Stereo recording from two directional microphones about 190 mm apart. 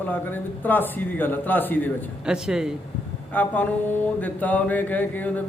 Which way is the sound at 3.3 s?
10° left (ahead or behind).